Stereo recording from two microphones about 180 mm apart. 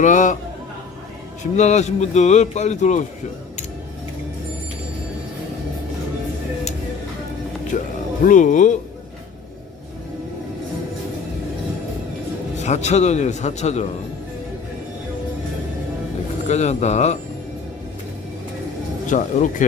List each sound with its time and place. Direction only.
0.0 s speech: 45° left (ahead or behind)
1.5 s speech: 40° left (ahead or behind)
7.7 s speech: 45° left (ahead or behind)
12.5 s speech: 40° left (ahead or behind)
16.5 s speech: 40° left (ahead or behind)
19.0 s speech: 45° left (ahead or behind)